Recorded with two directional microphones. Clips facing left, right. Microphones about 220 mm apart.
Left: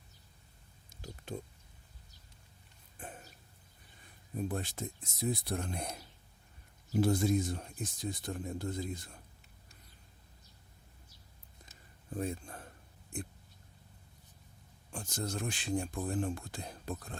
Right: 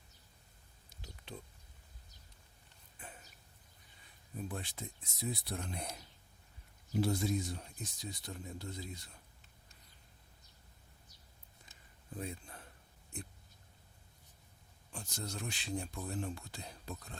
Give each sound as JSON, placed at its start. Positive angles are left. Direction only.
{"t": 0.9, "sound": "a sound", "side_deg": 45}
{"t": 3.0, "sound": "a sound", "side_deg": 50}
{"t": 4.4, "sound": "speech", "side_deg": 45}
{"t": 6.9, "sound": "speech", "side_deg": 50}
{"t": 12.1, "sound": "speech", "side_deg": 45}
{"t": 14.9, "sound": "speech", "side_deg": 50}